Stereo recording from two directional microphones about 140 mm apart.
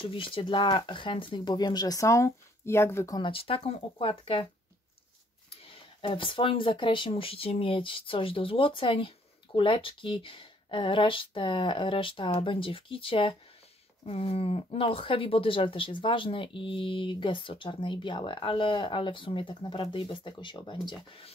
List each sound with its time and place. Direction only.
0.0 s speech: 40° left (ahead or behind); by 3.2 s 20° left (ahead or behind)
3.2 s speech: 40° left (ahead or behind)
5.6 s speech: 40° left (ahead or behind)